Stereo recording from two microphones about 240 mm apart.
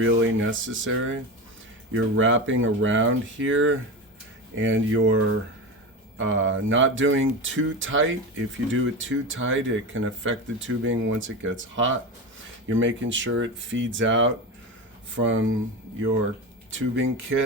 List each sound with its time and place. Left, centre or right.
0.0 s speech: right
16.7 s speech: right